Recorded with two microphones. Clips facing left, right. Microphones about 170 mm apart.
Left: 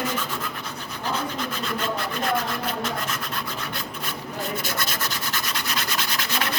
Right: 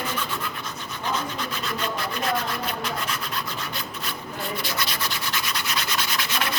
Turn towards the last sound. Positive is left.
turn(degrees=50)  # may be behind; listen again after turning